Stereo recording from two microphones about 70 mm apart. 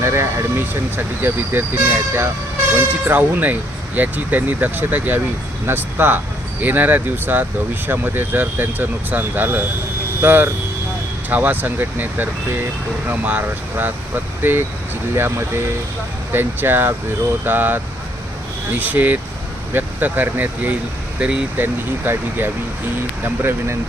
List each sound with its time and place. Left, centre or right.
0.0 s speech: right
18.8 s speech: right
21.2 s speech: centre
21.6 s speech: right